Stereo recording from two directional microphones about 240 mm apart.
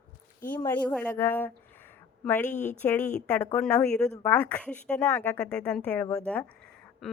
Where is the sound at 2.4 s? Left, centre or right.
Left.